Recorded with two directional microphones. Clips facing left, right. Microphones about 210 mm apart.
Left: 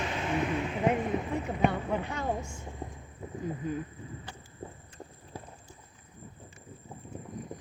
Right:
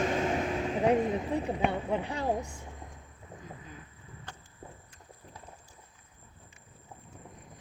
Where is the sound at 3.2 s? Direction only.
70° left (ahead or behind).